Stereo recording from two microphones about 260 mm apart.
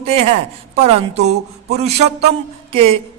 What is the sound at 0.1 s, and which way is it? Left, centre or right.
A man's voice, right.